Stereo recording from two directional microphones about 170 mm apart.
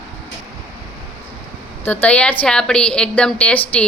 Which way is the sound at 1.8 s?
10° left (ahead or behind).